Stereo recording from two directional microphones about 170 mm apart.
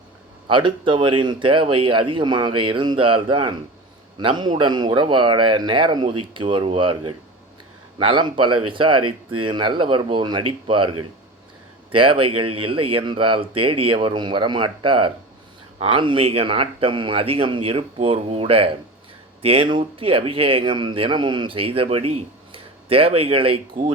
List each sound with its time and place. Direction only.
0.4 s speech: 30° right (ahead or behind)
11.9 s speech: 30° right (ahead or behind)